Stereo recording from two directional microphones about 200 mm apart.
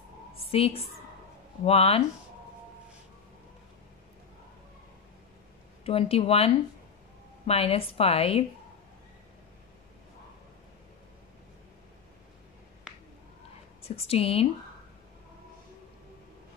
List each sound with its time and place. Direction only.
0.5 s a woman's voice: 30° left (ahead or behind)
5.9 s a woman's voice: 30° left (ahead or behind)
13.8 s a woman's voice: 30° left (ahead or behind)